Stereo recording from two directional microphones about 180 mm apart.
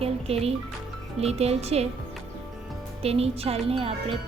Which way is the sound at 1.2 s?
35° right (ahead or behind).